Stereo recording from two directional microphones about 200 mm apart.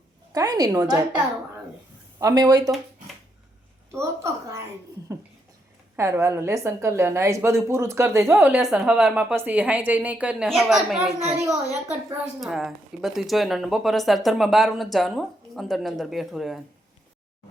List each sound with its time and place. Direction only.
0.3 s a woman's voice: 20° right (ahead or behind)
2.1 s speech: 20° right (ahead or behind)
3.9 s a woman's voice: 15° right (ahead or behind)
6.0 s a woman's voice: 15° right (ahead or behind)